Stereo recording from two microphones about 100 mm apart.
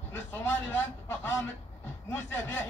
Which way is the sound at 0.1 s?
25° left (ahead or behind).